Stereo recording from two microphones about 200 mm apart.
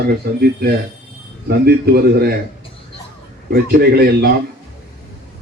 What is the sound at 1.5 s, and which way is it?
Speech, 50° right (ahead or behind).